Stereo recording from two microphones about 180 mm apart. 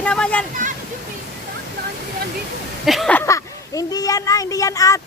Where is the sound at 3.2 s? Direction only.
20° left (ahead or behind).